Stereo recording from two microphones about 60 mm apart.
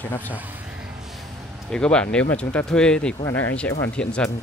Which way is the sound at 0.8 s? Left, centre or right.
Centre.